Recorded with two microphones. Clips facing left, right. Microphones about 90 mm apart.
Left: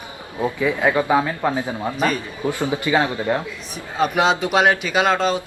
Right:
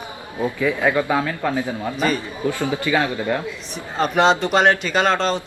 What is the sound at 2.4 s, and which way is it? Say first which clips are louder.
Speech: even; 20° left (ahead or behind).